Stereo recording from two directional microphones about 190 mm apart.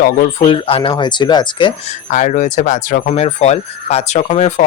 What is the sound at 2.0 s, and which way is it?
Speech, 40° left (ahead or behind).